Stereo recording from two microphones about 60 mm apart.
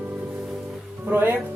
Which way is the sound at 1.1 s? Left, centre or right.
Right.